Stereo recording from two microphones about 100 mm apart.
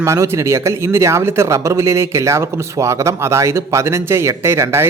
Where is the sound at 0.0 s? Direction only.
30° right (ahead or behind).